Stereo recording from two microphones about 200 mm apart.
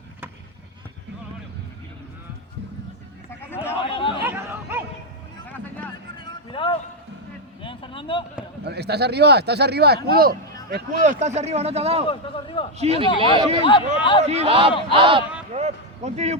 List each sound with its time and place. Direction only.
3.2 s a sound: 10° left (ahead or behind)
3.8 s a sound: 25° left (ahead or behind)
4.2 s chatter: 10° right (ahead or behind)
5.5 s vehicle: 10° left (ahead or behind)
6.1 s vehicle: 25° left (ahead or behind)
7.6 s a sound: 25° left (ahead or behind)
8.6 s speech: 55° right (ahead or behind)
11.0 s speech: 35° right (ahead or behind)
12.0 s a man's voice: 25° left (ahead or behind)
12.7 s speech: 30° right (ahead or behind)
13.7 s a man's voice: 25° left (ahead or behind)
14.3 s speech: 30° right (ahead or behind)
15.5 s a sound: 35° right (ahead or behind)